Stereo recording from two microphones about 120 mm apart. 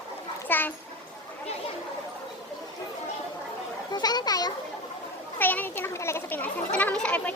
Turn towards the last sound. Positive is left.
turn(degrees=10)  # may be behind; listen again after turning